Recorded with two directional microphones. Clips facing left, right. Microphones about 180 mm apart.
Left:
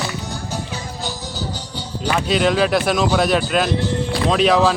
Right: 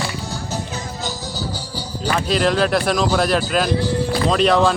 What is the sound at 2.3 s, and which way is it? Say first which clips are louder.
A man's voice: left 1 dB; centre (ahead or behind).